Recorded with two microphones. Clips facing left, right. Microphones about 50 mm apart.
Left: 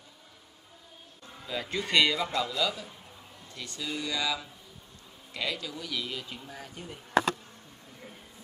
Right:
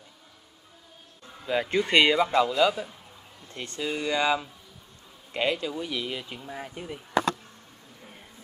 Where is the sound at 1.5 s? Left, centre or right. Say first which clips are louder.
Right 6 dB; right.